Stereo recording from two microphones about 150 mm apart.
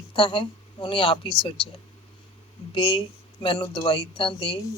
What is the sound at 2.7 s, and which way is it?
Speech, 35° left (ahead or behind).